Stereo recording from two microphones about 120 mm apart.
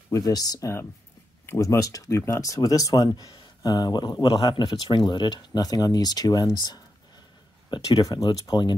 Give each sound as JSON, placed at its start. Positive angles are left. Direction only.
{"t": 0.1, "sound": "speech", "side_deg": 30}
{"t": 7.7, "sound": "speech", "side_deg": 35}